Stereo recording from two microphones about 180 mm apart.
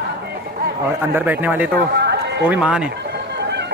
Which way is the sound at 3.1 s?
70° right (ahead or behind).